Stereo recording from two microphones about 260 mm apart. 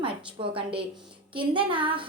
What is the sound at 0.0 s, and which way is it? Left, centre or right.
A woman's voice, right.